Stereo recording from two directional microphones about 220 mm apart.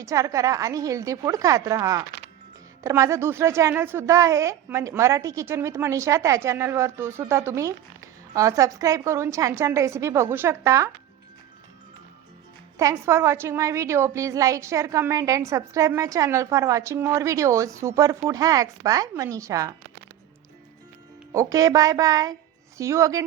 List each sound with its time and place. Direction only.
0.0 s a woman's voice: 15° right (ahead or behind)
12.7 s a woman's voice: 15° right (ahead or behind)
21.3 s a woman's voice: 15° right (ahead or behind)